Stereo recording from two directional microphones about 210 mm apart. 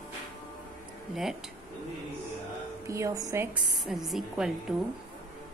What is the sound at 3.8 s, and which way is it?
Speech, centre (ahead or behind).